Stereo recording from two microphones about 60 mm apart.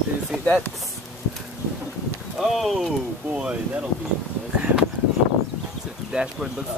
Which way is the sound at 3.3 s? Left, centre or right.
Right.